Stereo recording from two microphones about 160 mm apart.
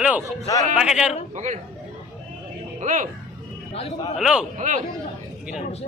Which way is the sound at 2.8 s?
50° right (ahead or behind).